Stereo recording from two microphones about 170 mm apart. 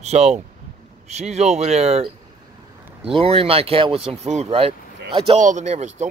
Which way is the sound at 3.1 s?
35° right (ahead or behind).